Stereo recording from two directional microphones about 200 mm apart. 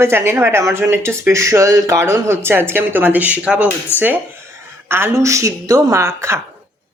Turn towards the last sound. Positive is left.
turn(degrees=-15)  # may be behind; listen again after turning